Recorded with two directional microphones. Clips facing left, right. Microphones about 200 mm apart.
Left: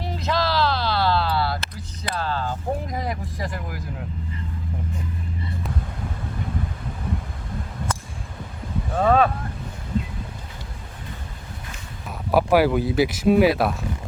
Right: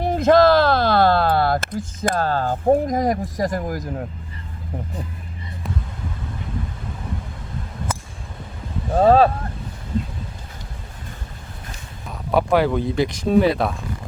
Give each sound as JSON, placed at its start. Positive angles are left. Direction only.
{"t": 0.0, "sound": "music", "side_deg": -50}
{"t": 8.9, "sound": "speech", "side_deg": -35}
{"t": 12.3, "sound": "speech", "side_deg": 5}